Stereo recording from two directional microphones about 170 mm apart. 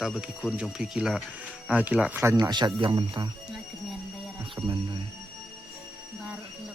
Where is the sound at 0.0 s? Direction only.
Centre (ahead or behind); by 3.2 s 25° right (ahead or behind).